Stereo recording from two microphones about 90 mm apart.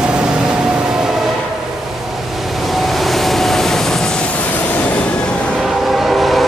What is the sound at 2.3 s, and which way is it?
Vehicle, centre (ahead or behind).